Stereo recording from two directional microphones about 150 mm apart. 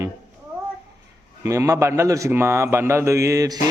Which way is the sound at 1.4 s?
20° right (ahead or behind).